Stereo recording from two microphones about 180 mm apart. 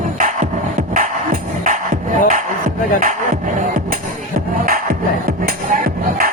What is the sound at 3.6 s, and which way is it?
Music, 50° right (ahead or behind).